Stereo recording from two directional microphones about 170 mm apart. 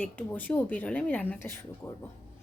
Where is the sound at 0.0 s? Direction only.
10° left (ahead or behind).